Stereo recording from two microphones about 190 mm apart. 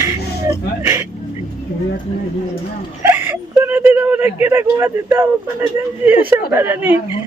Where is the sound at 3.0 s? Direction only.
10° right (ahead or behind).